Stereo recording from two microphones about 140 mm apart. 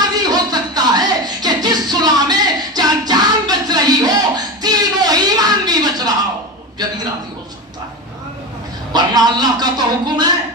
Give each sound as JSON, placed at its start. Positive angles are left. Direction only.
{"t": 0.2, "sound": "music", "side_deg": -30}
{"t": 8.9, "sound": "music", "side_deg": -30}